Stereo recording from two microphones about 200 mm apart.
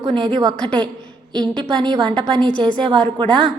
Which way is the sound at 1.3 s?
20° right (ahead or behind).